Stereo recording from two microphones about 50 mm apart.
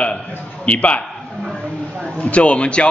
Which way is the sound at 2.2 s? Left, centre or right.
Left.